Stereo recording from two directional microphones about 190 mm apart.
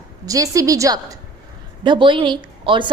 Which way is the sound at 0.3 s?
15° right (ahead or behind).